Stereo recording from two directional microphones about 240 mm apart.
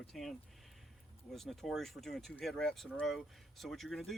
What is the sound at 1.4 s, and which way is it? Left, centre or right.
Speech, centre.